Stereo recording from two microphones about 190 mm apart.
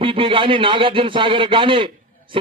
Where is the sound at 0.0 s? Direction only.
30° right (ahead or behind).